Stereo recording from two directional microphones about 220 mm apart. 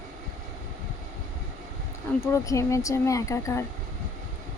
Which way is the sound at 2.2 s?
15° left (ahead or behind).